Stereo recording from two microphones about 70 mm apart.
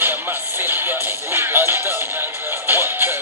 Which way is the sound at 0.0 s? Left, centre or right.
Right.